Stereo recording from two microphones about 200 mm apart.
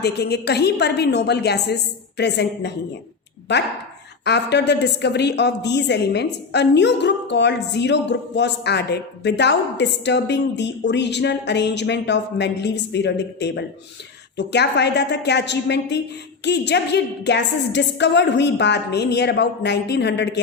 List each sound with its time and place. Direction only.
0.0 s a woman's voice: 55° left (ahead or behind)